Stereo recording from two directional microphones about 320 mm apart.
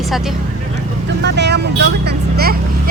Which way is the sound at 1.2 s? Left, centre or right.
Right.